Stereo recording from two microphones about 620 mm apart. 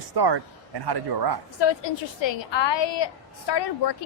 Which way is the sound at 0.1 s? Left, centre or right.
Right.